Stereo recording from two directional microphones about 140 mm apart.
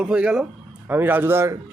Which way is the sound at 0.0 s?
5° right (ahead or behind).